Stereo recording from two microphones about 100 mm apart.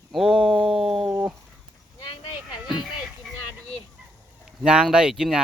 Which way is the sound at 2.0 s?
50° left (ahead or behind).